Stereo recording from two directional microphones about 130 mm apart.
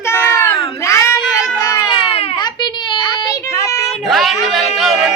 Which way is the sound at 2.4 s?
35° left (ahead or behind).